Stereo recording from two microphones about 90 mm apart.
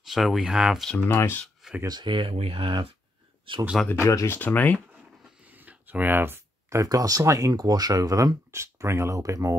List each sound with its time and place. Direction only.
0.0 s speech: centre (ahead or behind)
1.0 s speech: 25° left (ahead or behind)
1.9 s speech: 60° right (ahead or behind); by 3.6 s 75° right (ahead or behind)
4.0 s speech: 30° left (ahead or behind)
4.4 s speech: 20° left (ahead or behind)
5.5 s a sound: 20° right (ahead or behind)
6.8 s speech: 40° right (ahead or behind)